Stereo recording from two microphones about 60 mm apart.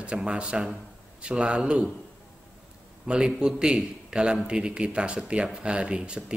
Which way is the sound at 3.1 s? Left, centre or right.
Centre.